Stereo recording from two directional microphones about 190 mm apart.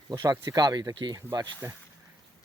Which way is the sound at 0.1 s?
20° right (ahead or behind).